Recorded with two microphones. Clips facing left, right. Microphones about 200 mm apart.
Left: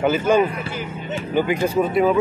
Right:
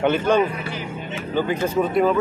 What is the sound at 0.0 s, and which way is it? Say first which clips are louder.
Speech: left 1 dB; 5° left (ahead or behind).